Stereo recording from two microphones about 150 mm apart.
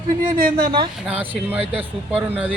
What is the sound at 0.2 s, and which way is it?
Speech, 70° right (ahead or behind).